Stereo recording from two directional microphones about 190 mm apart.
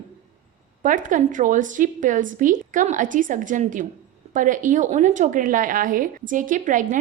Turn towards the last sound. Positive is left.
turn(degrees=-45)  # may be behind; listen again after turning